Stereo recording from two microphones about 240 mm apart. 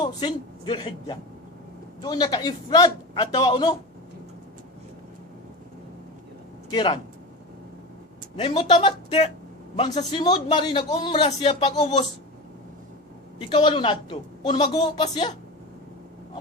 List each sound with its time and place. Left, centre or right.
0.0 s a man's voice: centre
6.7 s a man's voice: centre
8.4 s a man's voice: left
13.5 s a man's voice: centre